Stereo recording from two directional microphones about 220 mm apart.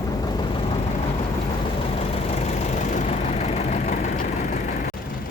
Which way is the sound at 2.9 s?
30° left (ahead or behind).